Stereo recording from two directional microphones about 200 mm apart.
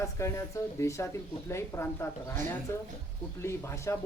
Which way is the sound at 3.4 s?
15° left (ahead or behind).